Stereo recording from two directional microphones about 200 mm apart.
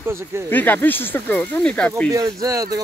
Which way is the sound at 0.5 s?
10° left (ahead or behind).